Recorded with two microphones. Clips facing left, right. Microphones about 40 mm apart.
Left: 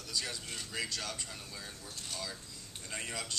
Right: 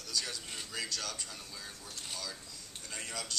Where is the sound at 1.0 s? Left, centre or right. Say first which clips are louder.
Even; centre.